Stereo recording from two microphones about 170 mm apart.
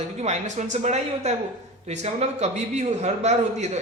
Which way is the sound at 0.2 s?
45° right (ahead or behind).